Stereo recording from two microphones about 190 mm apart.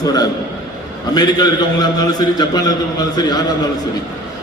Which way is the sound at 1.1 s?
20° left (ahead or behind).